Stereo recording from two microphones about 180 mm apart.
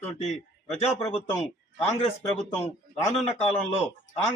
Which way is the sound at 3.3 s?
35° left (ahead or behind).